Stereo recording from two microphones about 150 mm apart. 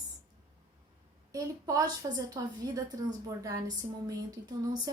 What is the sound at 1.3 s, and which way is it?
A woman's voice, 25° right (ahead or behind).